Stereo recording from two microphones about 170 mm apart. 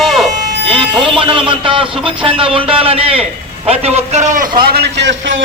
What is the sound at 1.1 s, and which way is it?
A man's voice, 30° right (ahead or behind).